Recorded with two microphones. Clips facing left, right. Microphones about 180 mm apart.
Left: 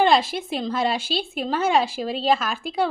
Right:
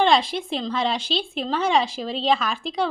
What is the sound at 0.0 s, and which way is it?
Speech, 5° left (ahead or behind).